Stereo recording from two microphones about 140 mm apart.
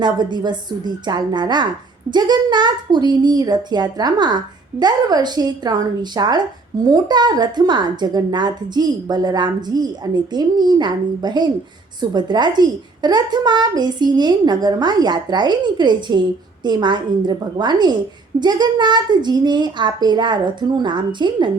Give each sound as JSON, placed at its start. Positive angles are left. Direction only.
{"t": 0.0, "sound": "a child's voice", "side_deg": -30}